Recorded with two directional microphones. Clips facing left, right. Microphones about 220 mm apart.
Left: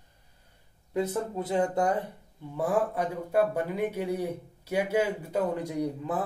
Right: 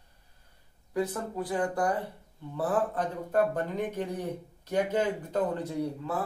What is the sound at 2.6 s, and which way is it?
Speech, 10° left (ahead or behind).